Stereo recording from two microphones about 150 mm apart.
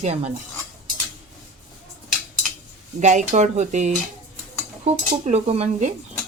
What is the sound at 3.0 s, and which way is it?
Speech, 55° right (ahead or behind).